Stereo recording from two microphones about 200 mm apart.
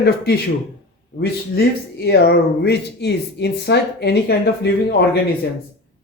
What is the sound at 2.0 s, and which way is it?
Speech, 55° left (ahead or behind).